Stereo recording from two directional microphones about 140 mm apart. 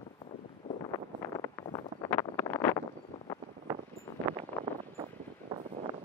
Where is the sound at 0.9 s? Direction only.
25° left (ahead or behind).